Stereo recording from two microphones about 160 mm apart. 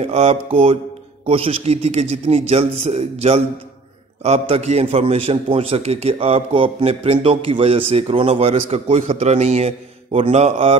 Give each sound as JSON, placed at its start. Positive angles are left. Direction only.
{"t": 0.0, "sound": "a man's voice", "side_deg": -40}